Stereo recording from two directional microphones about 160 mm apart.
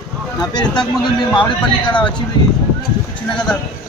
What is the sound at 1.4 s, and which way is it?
Speech, 30° left (ahead or behind).